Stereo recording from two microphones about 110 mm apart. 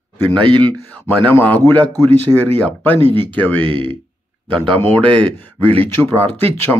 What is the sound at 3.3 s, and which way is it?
Speech, 15° left (ahead or behind).